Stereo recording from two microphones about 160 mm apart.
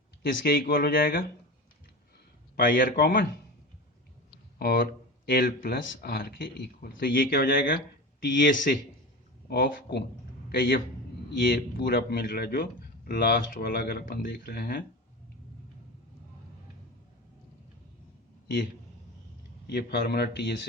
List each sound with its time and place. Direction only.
0.2 s a man's voice: 70° left (ahead or behind)
2.6 s a man's voice: 60° left (ahead or behind)
4.5 s a man's voice: 70° left (ahead or behind)
18.4 s a man's voice: 60° left (ahead or behind)
19.6 s a man's voice: 85° left